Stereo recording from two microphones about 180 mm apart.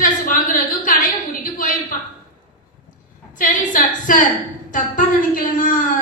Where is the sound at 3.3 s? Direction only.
50° left (ahead or behind).